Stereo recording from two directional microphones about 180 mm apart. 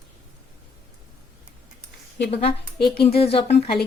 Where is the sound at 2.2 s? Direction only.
35° left (ahead or behind).